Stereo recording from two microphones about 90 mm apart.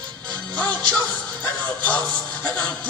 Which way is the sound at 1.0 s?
20° left (ahead or behind).